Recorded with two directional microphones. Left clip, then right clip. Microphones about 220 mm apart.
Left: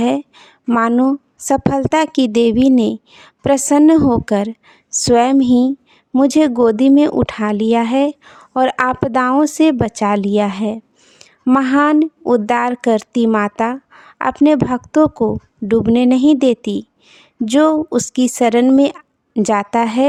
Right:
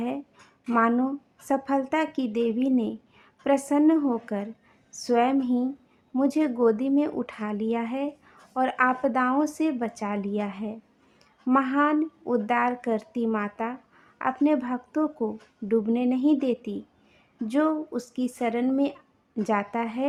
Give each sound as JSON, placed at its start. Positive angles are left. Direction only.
{"t": 0.7, "sound": "a woman's voice", "side_deg": 45}